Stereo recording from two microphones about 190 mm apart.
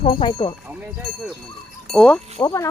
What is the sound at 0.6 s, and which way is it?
Speech, 10° right (ahead or behind).